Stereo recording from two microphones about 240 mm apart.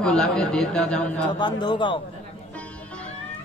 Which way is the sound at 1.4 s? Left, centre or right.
Centre.